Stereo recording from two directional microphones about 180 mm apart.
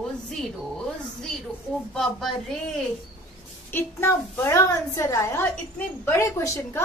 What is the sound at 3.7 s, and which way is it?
A woman's voice, 15° left (ahead or behind).